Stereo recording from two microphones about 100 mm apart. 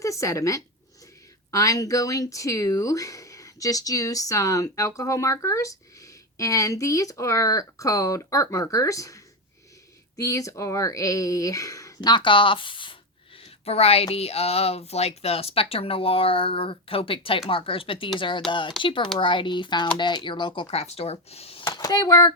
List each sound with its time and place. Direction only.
0.0 s speech: 30° left (ahead or behind)
11.9 s speech: 50° left (ahead or behind)
13.4 s speech: 85° left
21.7 s speech: 40° left (ahead or behind)